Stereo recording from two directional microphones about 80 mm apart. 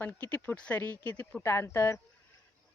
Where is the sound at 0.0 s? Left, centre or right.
Left.